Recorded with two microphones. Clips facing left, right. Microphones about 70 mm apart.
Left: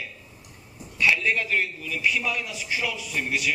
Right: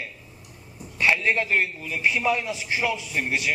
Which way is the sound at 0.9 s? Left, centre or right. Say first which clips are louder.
Right 1 dB; right.